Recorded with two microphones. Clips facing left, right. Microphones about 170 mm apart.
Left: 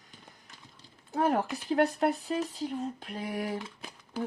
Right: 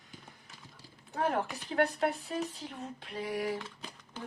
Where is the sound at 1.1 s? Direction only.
40° left (ahead or behind).